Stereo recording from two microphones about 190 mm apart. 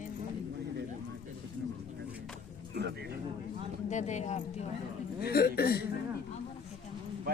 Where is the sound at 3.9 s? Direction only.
40° left (ahead or behind).